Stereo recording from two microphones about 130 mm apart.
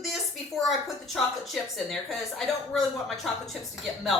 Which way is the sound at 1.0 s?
Centre (ahead or behind).